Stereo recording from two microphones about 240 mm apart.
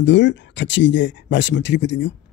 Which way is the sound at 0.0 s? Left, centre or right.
Left.